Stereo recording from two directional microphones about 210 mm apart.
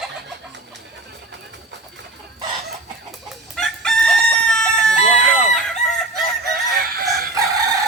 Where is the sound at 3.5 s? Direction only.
Centre (ahead or behind).